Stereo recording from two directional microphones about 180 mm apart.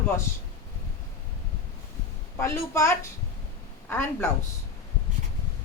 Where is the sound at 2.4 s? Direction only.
15° left (ahead or behind).